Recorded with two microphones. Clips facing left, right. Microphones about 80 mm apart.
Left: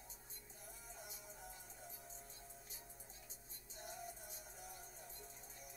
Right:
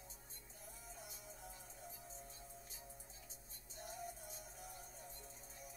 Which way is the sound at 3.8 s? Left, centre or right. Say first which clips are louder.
Right 2 dB; centre.